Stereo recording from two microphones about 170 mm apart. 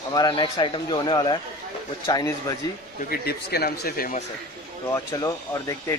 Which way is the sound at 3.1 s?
65° left (ahead or behind).